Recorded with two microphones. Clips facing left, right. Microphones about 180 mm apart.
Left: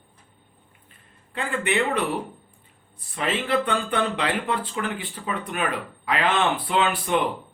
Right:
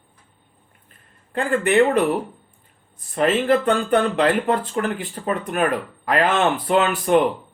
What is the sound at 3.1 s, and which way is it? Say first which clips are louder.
Speech: right 7 dB; 50° right (ahead or behind).